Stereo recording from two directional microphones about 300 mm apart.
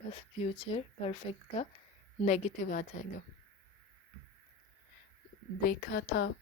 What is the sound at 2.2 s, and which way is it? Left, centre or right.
Speech, left.